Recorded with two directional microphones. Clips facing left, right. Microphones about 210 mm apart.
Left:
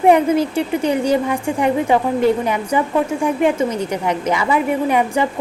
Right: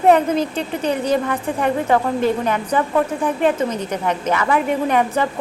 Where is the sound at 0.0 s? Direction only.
10° left (ahead or behind).